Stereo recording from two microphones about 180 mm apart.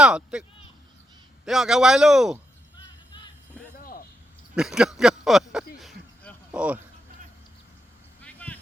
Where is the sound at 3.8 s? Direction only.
55° left (ahead or behind).